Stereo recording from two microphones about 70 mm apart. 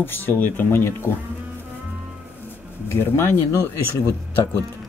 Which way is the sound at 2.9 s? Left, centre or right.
Left.